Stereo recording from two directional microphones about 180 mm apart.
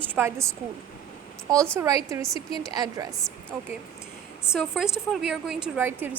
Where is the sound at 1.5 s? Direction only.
15° right (ahead or behind).